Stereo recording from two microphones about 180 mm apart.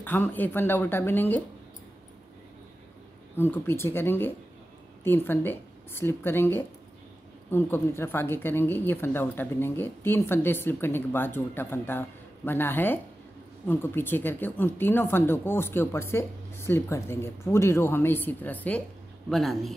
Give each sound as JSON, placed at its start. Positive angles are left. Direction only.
{"t": 0.0, "sound": "a woman's voice", "side_deg": 10}
{"t": 3.3, "sound": "a woman's voice", "side_deg": 10}